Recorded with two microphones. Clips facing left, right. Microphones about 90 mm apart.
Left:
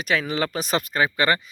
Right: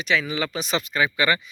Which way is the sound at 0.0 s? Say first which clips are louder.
Left 1 dB; 45° left (ahead or behind).